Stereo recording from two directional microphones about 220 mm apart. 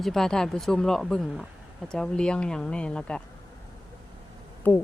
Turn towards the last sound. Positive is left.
turn(degrees=10)  # may be behind; listen again after turning